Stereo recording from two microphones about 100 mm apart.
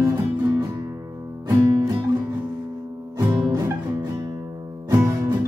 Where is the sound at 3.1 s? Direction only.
45° right (ahead or behind).